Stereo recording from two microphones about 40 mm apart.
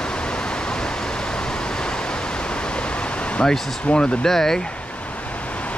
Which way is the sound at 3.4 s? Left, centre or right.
Centre.